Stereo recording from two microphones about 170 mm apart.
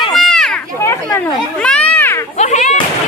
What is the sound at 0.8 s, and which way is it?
Speech, 15° left (ahead or behind).